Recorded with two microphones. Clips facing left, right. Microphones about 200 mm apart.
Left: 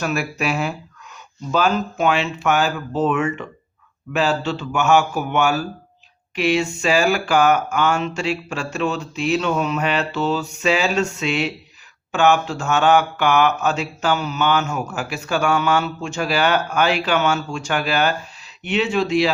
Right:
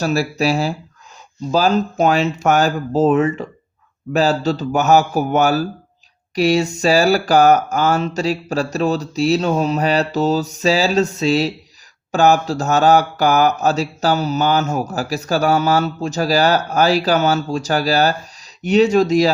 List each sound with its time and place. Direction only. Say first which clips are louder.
0.0 s mantra: right 5 dB; 35° right (ahead or behind)